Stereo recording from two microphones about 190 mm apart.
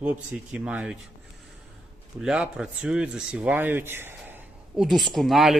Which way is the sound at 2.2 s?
5° right (ahead or behind).